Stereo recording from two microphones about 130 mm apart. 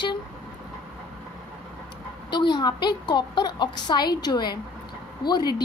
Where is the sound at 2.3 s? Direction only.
35° left (ahead or behind).